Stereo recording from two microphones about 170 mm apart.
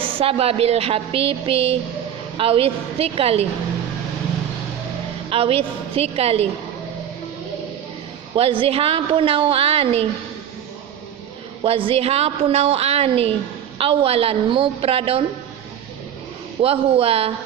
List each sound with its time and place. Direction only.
0.2 s a woman's voice: 35° right (ahead or behind)
5.3 s a woman's voice: 35° right (ahead or behind)
8.4 s a woman's voice: 30° right (ahead or behind)
11.6 s a woman's voice: 35° right (ahead or behind)
16.6 s a woman's voice: 35° right (ahead or behind)